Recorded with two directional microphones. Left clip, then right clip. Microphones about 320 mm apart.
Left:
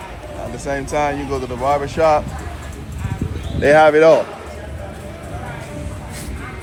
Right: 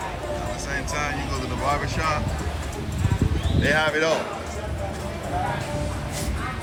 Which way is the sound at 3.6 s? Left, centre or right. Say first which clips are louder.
Left 11 dB; centre.